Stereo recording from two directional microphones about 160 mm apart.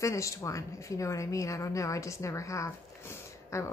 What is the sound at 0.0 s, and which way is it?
A woman's voice, 20° left (ahead or behind).